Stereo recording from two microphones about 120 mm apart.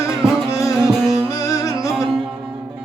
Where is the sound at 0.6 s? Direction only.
Centre (ahead or behind).